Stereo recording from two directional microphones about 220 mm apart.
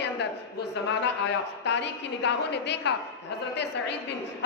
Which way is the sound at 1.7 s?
55° left (ahead or behind).